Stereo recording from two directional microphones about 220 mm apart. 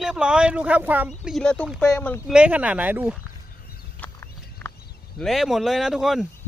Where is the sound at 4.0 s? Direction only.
10° left (ahead or behind).